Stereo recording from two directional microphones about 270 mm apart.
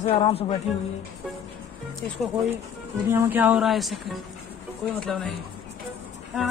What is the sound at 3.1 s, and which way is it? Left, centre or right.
Speech, centre.